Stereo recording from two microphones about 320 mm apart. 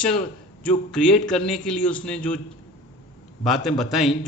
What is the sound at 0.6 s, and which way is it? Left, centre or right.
Speech, centre.